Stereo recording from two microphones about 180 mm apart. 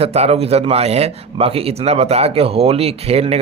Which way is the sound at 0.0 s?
35° right (ahead or behind).